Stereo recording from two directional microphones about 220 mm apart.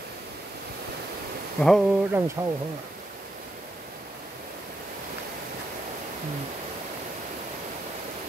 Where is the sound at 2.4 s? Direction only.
15° right (ahead or behind).